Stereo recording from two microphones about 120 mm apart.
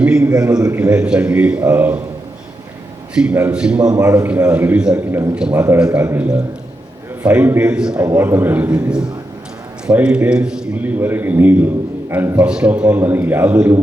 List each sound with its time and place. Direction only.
0.0 s a man's voice: 10° right (ahead or behind)
3.3 s a man's voice: 10° right (ahead or behind)
3.9 s a man's voice: 30° right (ahead or behind)
4.3 s a man's voice: 10° right (ahead or behind)
8.1 s a man's voice: 15° right (ahead or behind)